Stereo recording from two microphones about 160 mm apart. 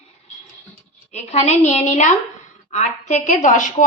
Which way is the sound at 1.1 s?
45° left (ahead or behind).